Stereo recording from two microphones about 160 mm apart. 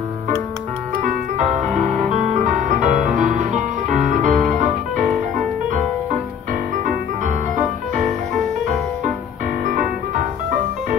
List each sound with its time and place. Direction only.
1.0 s music: 50° right (ahead or behind)
6.8 s music: 55° right (ahead or behind)